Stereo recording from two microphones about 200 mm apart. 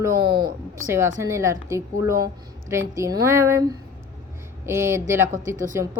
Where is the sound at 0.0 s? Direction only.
20° right (ahead or behind).